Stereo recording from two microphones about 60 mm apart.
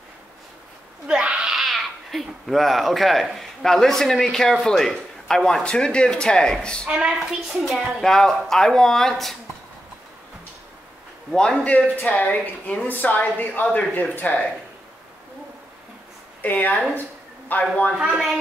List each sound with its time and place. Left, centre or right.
1.0 s cat: centre
3.3 s a man's voice: centre
6.9 s a woman's voice: centre
7.6 s a man's voice: centre
11.3 s speech: centre
16.3 s speech: left
17.9 s a woman's voice: centre